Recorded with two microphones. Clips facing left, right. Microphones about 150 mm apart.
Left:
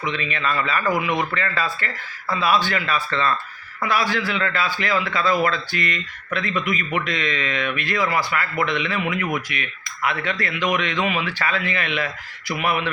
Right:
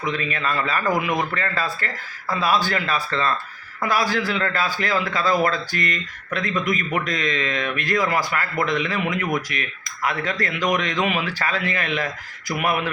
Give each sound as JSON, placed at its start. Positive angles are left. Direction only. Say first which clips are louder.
{"t": 0.0, "sound": "a man's voice", "louder": "even", "side_deg": -45}